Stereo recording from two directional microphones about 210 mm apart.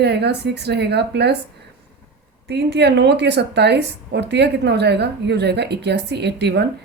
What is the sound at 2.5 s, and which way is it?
A woman's voice, 55° right (ahead or behind).